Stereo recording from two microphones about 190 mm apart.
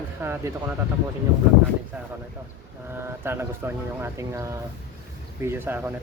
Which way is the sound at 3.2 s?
10° right (ahead or behind).